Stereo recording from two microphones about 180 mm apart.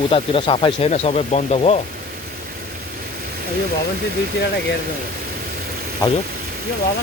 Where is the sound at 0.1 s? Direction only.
30° left (ahead or behind).